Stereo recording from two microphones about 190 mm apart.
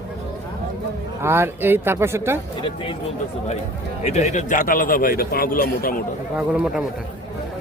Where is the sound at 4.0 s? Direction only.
35° left (ahead or behind).